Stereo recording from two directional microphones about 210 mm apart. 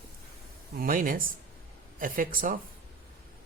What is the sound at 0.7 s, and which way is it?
Speech, 40° right (ahead or behind).